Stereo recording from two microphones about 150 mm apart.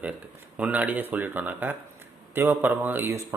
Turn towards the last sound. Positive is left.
turn(degrees=-15)  # may be behind; listen again after turning